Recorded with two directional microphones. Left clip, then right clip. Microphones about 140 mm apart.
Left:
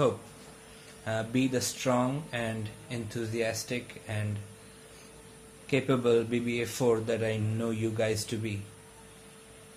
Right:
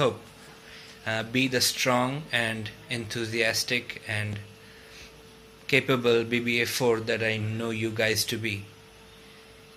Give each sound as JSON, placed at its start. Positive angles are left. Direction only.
{"t": 1.0, "sound": "speech", "side_deg": 5}
{"t": 5.7, "sound": "a man's voice", "side_deg": 0}